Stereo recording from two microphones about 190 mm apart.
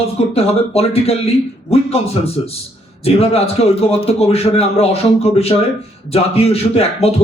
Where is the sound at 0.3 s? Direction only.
30° left (ahead or behind).